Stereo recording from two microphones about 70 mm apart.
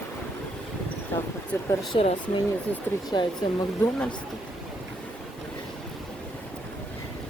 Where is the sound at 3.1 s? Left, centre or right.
Left.